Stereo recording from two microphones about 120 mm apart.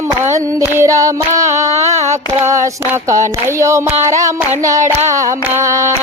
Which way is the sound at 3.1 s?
25° right (ahead or behind).